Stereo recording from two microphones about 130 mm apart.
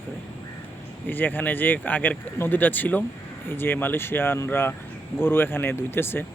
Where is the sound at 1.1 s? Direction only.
15° left (ahead or behind).